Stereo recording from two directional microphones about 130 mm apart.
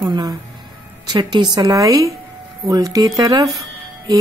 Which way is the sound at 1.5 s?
25° right (ahead or behind).